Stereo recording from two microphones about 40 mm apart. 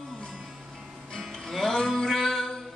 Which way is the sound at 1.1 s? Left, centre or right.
Centre.